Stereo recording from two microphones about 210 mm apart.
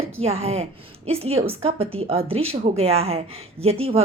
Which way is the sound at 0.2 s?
30° right (ahead or behind).